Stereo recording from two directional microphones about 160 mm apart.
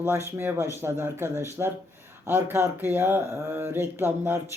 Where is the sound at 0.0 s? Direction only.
15° right (ahead or behind).